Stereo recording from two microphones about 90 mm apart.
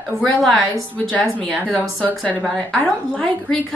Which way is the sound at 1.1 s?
15° left (ahead or behind).